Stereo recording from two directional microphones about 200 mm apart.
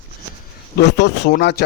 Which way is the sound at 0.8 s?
60° left (ahead or behind).